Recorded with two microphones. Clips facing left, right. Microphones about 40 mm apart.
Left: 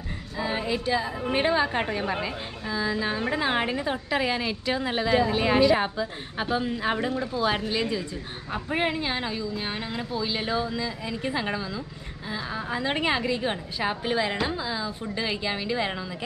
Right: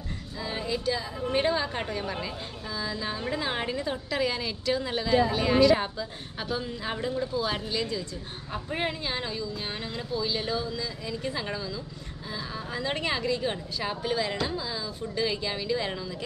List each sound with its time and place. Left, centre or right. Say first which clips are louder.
0.4 s a woman's voice: left 4 dB; left